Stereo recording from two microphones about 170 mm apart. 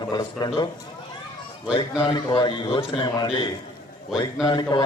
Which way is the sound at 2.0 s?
25° left (ahead or behind).